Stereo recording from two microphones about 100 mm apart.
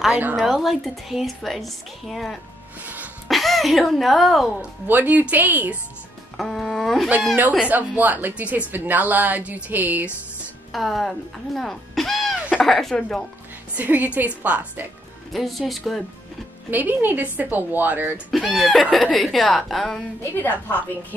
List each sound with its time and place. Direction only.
0.4 s a woman's voice: centre (ahead or behind)
2.8 s a sound: 15° right (ahead or behind)
3.3 s speech: centre (ahead or behind)
4.6 s a woman's voice: 20° right (ahead or behind)
6.3 s music: 5° left (ahead or behind)
7.6 s a woman's voice: 15° right (ahead or behind)
10.7 s a woman's voice: centre (ahead or behind)
13.7 s a woman's voice: 15° right (ahead or behind)
15.3 s a woman's voice: centre (ahead or behind)
16.7 s a woman's voice: 20° right (ahead or behind)
18.3 s a woman's voice: centre (ahead or behind)
20.3 s a woman's voice: 20° left (ahead or behind)